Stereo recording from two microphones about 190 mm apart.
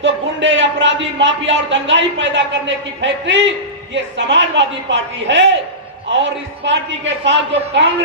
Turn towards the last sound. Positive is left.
turn(degrees=-70)  # may be behind; listen again after turning